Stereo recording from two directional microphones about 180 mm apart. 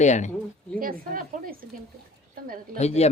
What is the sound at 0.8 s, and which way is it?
Speech, 50° right (ahead or behind).